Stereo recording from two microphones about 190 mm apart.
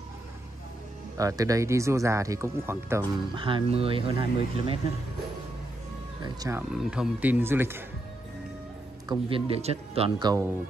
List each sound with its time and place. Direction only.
1.1 s speech: 20° right (ahead or behind)
3.3 s speech: 25° right (ahead or behind)
6.2 s speech: 20° right (ahead or behind)
6.7 s speech: 5° right (ahead or behind)
9.1 s speech: 30° right (ahead or behind)